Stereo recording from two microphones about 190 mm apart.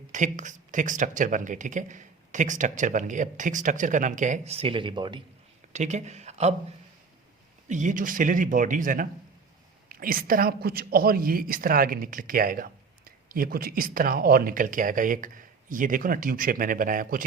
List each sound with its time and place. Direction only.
0.1 s speech: 40° right (ahead or behind); by 5.2 s 25° right (ahead or behind)
5.7 s speech: 35° right (ahead or behind)
7.7 s a woman's voice: 40° right (ahead or behind)